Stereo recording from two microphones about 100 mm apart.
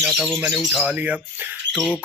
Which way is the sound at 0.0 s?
5° left (ahead or behind).